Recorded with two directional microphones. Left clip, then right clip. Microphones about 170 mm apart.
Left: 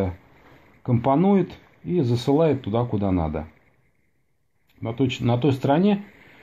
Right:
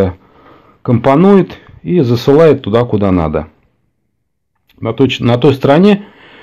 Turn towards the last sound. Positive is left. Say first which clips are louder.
# right 13 dB
turn(degrees=-20)  # may be behind; listen again after turning